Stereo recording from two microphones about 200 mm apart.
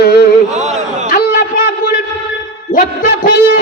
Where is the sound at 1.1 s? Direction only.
40° left (ahead or behind).